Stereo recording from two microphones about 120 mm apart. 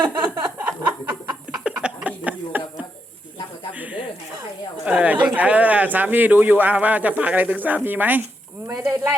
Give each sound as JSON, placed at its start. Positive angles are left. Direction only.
{"t": 0.0, "sound": "a sound", "side_deg": -15}
{"t": 1.6, "sound": "chuckle", "side_deg": -10}
{"t": 4.9, "sound": "speech", "side_deg": -10}